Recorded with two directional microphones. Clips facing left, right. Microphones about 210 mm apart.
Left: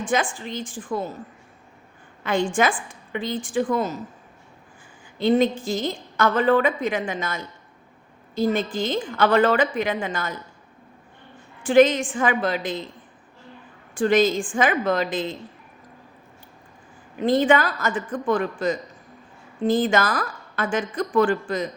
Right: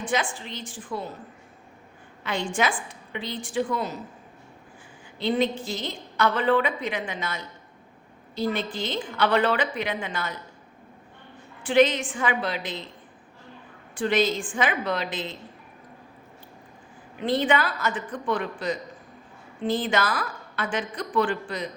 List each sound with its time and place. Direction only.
0.0 s a woman's voice: 50° left (ahead or behind)
2.2 s a woman's voice: 50° left (ahead or behind)
5.1 s a woman's voice: 45° left (ahead or behind)
11.6 s a woman's voice: 45° left (ahead or behind)
13.9 s a woman's voice: 45° left (ahead or behind)
17.2 s a woman's voice: 45° left (ahead or behind)